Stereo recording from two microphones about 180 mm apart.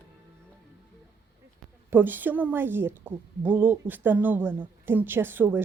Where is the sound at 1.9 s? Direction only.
10° right (ahead or behind).